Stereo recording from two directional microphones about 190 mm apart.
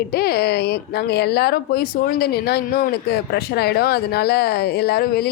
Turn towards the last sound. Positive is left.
turn(degrees=55)  # may be behind; listen again after turning